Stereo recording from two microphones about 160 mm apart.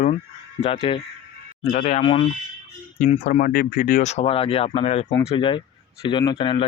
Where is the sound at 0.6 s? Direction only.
35° left (ahead or behind).